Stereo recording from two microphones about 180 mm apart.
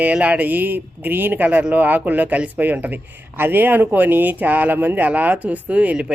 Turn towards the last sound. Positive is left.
turn(degrees=-5)  # may be behind; listen again after turning